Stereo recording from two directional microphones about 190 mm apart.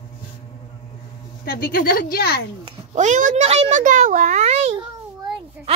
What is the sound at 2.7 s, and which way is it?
A child's voice, 40° right (ahead or behind).